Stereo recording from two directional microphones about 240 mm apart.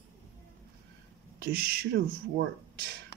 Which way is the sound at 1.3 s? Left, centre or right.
Right.